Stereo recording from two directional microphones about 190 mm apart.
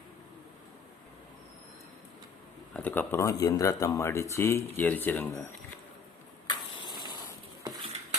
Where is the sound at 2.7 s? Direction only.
10° left (ahead or behind).